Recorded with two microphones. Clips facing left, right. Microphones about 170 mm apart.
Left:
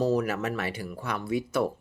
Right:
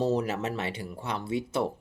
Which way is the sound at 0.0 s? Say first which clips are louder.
Left 1 dB; 25° right (ahead or behind).